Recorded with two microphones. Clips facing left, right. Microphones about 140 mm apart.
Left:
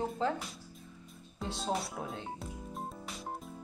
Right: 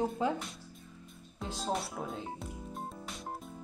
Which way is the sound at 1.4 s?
Centre (ahead or behind).